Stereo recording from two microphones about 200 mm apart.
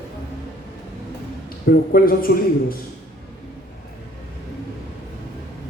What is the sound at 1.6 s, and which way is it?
A man's voice, 50° left (ahead or behind).